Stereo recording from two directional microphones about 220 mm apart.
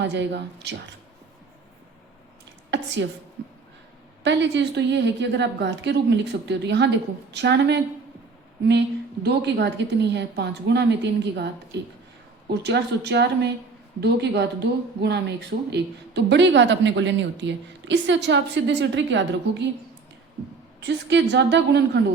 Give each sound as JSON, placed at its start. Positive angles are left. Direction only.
{"t": 0.0, "sound": "speech", "side_deg": -50}
{"t": 2.6, "sound": "a sound", "side_deg": -55}
{"t": 4.2, "sound": "speech", "side_deg": -55}
{"t": 9.2, "sound": "speech", "side_deg": -50}
{"t": 20.8, "sound": "speech", "side_deg": -50}